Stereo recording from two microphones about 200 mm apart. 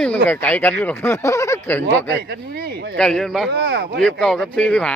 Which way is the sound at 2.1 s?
55° right (ahead or behind).